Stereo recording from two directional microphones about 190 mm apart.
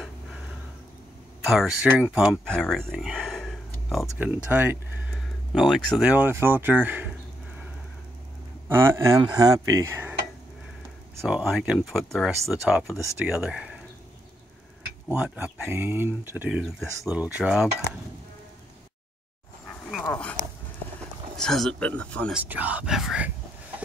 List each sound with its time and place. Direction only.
1.4 s speech: centre (ahead or behind)
4.2 s speech: 10° right (ahead or behind)
8.6 s speech: 10° right (ahead or behind)
11.1 s speech: 5° right (ahead or behind)
15.0 s speech: 10° right (ahead or behind)
20.1 s speech: 5° left (ahead or behind)
21.4 s speech: centre (ahead or behind)
22.3 s speech: 10° right (ahead or behind)